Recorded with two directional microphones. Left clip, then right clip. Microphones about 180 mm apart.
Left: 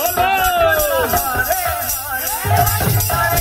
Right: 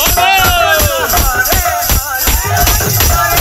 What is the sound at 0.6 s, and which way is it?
Music, 40° right (ahead or behind).